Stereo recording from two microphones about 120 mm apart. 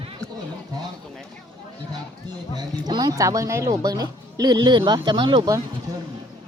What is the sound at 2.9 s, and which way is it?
A woman's voice, 35° right (ahead or behind).